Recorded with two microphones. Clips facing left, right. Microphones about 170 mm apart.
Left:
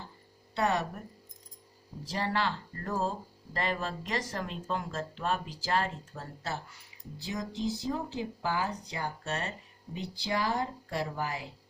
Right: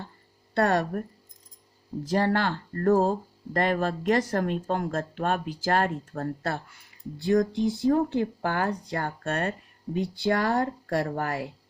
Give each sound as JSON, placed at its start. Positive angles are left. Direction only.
{"t": 0.5, "sound": "speech", "side_deg": -55}
{"t": 2.0, "sound": "speech", "side_deg": -50}